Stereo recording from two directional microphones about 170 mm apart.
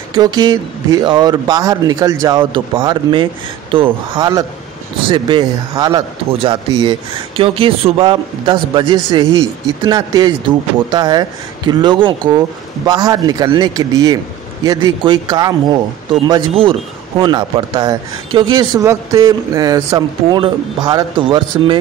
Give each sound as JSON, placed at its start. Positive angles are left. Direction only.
{"t": 0.1, "sound": "speech", "side_deg": -25}